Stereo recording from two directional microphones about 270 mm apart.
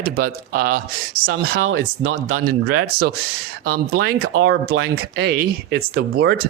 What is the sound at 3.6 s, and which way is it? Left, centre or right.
Speech, right.